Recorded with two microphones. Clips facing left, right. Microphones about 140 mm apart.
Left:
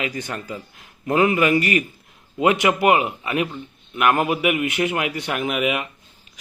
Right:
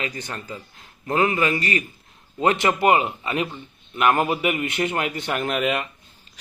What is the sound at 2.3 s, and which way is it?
A man's voice, 10° left (ahead or behind).